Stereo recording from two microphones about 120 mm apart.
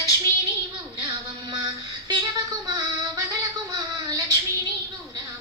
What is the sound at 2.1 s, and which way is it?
Female singing, 35° right (ahead or behind).